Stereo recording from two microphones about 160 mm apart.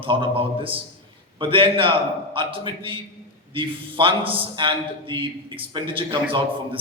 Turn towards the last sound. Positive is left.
turn(degrees=-30)  # may be behind; listen again after turning